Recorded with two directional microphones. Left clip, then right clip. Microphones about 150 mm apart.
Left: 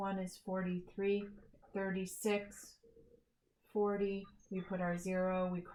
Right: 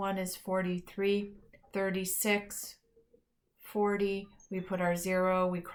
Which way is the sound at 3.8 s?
25° right (ahead or behind).